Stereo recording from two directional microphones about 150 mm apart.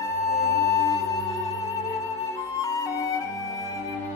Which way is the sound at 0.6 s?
20° left (ahead or behind).